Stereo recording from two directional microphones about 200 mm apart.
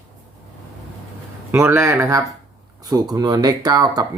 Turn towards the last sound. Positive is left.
turn(degrees=-20)  # may be behind; listen again after turning